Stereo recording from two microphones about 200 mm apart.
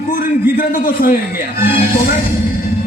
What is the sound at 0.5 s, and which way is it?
Speech, 45° left (ahead or behind).